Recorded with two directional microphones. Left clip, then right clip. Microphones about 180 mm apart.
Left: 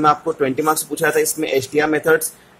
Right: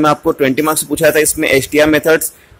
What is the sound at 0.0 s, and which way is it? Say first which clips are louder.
A man's voice: right 4 dB; 25° right (ahead or behind).